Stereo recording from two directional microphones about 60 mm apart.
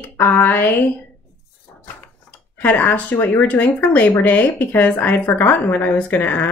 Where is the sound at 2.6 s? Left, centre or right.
Left.